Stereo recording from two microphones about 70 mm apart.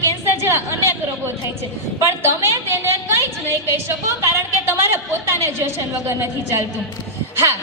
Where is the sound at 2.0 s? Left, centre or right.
Right.